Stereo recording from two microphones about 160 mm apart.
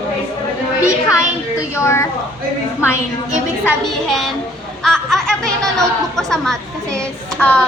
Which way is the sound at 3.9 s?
Centre (ahead or behind).